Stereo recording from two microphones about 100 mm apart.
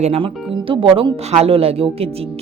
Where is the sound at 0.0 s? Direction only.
80° right.